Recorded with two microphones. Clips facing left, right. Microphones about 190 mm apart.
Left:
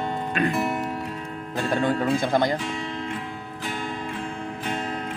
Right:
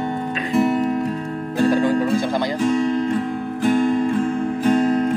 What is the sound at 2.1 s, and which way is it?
Speech, 50° left (ahead or behind).